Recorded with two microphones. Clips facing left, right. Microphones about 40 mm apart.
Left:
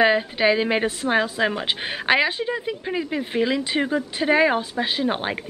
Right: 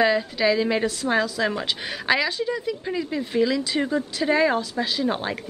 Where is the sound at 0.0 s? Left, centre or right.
Left.